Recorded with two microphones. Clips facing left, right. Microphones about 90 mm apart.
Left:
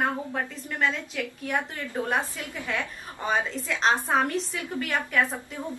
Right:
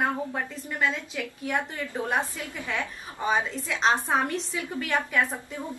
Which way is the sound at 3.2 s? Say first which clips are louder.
Right 1 dB; 5° right (ahead or behind).